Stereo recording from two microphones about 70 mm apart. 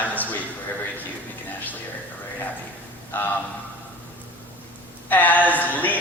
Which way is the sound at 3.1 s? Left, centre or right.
Left.